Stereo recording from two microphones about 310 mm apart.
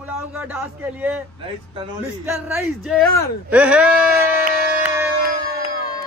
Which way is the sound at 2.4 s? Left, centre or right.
Centre.